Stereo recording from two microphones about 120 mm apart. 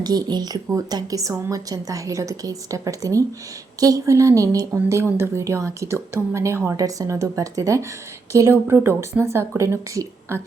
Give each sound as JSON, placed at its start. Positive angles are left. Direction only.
{"t": 0.0, "sound": "a woman's voice", "side_deg": -35}